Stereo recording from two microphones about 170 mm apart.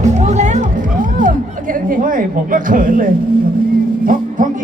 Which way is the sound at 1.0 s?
50° right (ahead or behind).